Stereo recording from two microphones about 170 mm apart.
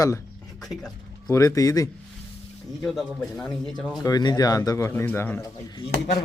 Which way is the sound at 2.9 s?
5° left (ahead or behind).